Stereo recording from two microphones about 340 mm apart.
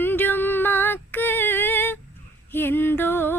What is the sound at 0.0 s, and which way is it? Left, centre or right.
Female singing, centre.